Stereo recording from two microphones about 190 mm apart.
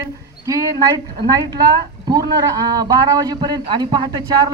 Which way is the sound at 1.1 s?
20° right (ahead or behind).